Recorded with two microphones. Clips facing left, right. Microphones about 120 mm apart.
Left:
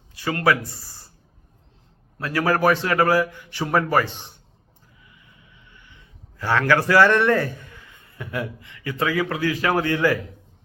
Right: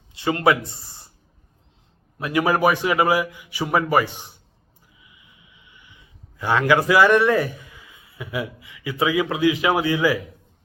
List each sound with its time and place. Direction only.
0.1 s speech: 25° right (ahead or behind)
2.1 s a man's voice: 15° right (ahead or behind)